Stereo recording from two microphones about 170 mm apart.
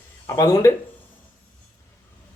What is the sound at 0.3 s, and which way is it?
Speech, 15° left (ahead or behind).